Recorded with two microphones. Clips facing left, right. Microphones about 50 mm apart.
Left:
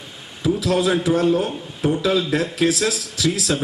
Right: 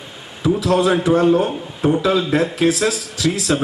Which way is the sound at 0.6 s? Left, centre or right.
Centre.